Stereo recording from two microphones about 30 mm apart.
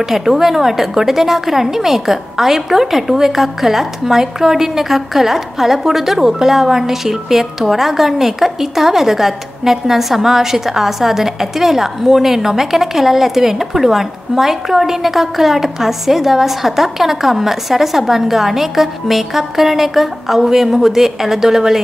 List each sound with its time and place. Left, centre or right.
0.0 s a woman's voice: centre